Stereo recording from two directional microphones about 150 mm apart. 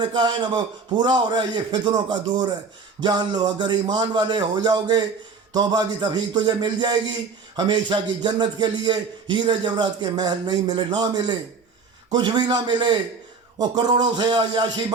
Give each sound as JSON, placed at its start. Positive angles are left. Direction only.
{"t": 0.0, "sound": "a man's voice", "side_deg": -30}